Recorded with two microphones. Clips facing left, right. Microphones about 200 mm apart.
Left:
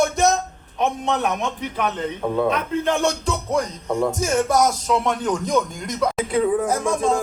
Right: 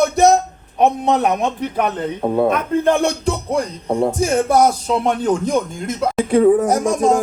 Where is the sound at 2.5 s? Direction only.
55° right (ahead or behind).